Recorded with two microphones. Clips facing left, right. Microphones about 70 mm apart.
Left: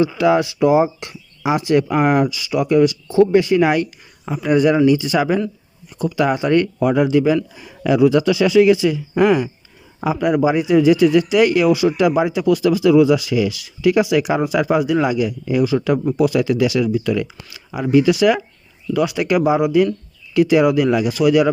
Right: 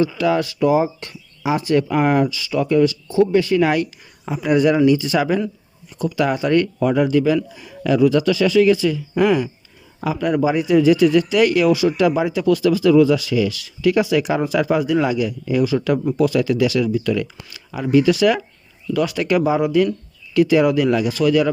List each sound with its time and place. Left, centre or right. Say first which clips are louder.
0.0 s speech: left 3 dB; left
4.3 s speech: left 1 dB; centre
6.3 s speech: left 1 dB; centre